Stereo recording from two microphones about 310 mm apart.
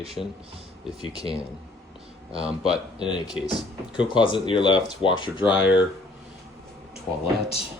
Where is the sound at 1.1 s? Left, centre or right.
Centre.